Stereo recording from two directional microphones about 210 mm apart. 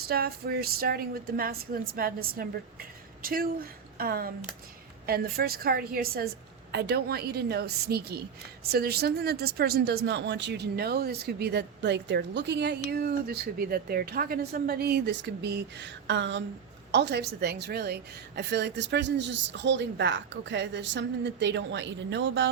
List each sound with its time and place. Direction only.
0.1 s a woman's voice: 50° right (ahead or behind)